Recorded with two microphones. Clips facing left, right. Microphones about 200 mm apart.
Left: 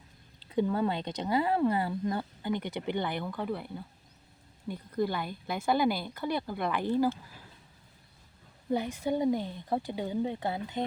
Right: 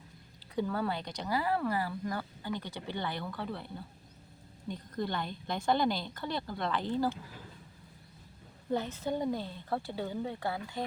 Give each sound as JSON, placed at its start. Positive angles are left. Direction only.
{"t": 0.5, "sound": "speech", "side_deg": 20}
{"t": 4.7, "sound": "speech", "side_deg": 10}
{"t": 8.7, "sound": "speech", "side_deg": 15}